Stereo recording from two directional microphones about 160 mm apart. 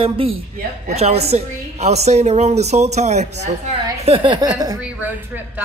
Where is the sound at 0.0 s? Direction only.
35° right (ahead or behind).